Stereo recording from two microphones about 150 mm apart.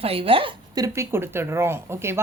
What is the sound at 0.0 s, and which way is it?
Speech, 40° right (ahead or behind).